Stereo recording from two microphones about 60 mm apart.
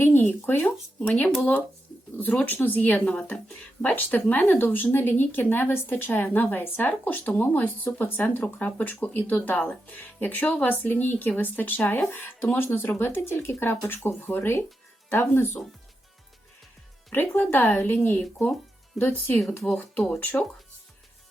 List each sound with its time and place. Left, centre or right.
0.0 s speech: left
1.0 s speech: centre
1.3 s speech: centre
2.1 s speech: left
3.2 s speech: centre
3.8 s speech: left
17.1 s speech: left